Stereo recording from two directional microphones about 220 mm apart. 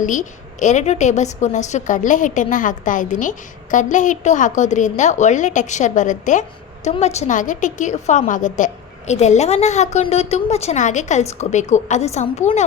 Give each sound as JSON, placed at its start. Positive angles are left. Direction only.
{"t": 0.0, "sound": "a woman's voice", "side_deg": 35}